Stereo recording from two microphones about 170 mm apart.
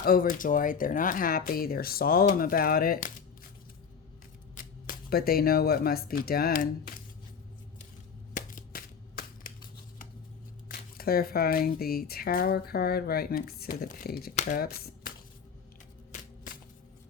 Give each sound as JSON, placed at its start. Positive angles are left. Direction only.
{"t": 0.0, "sound": "speech", "side_deg": 55}
{"t": 4.5, "sound": "speech", "side_deg": 60}
{"t": 8.3, "sound": "shuffling cards", "side_deg": 50}
{"t": 10.7, "sound": "speech", "side_deg": 60}
{"t": 14.3, "sound": "speech", "side_deg": 50}